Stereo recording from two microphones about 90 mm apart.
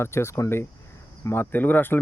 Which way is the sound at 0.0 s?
30° left (ahead or behind).